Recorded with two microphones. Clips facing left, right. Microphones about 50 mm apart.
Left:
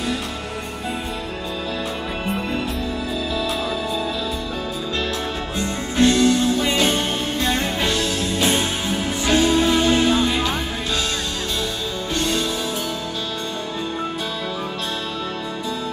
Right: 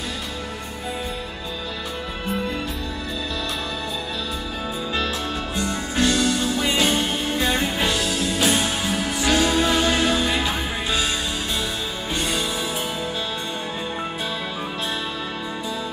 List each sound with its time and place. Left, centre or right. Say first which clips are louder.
5.6 s music: left 4 dB; left
6.5 s music: left 2 dB; right
8.2 s music: left 1 dB; left
9.4 s music: left 4 dB; right
12.2 s music: left 3 dB; centre